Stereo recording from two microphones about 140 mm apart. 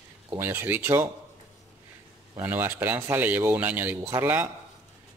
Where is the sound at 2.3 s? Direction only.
15° right (ahead or behind).